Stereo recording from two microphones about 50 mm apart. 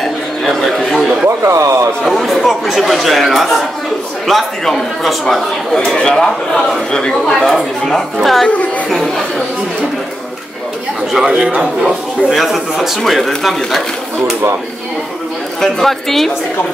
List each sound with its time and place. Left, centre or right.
0.4 s a sound: centre
1.4 s a man's voice: right
2.1 s a man's voice: centre
11.1 s a man's voice: centre
12.3 s a man's voice: centre
15.6 s speech: centre